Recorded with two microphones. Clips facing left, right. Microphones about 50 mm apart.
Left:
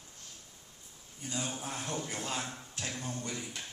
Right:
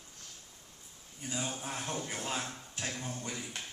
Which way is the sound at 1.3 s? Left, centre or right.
Centre.